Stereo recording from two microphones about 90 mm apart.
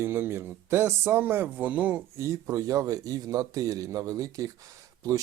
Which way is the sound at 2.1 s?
35° right (ahead or behind).